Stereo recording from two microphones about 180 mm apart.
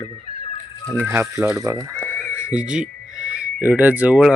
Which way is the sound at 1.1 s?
15° right (ahead or behind).